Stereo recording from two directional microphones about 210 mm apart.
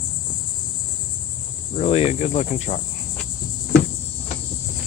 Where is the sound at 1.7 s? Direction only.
30° left (ahead or behind).